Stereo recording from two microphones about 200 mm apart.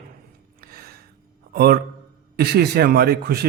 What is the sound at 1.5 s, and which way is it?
Speech, 50° right (ahead or behind).